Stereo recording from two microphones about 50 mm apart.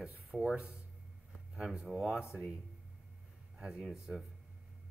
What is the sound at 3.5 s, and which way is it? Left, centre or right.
Speech, centre.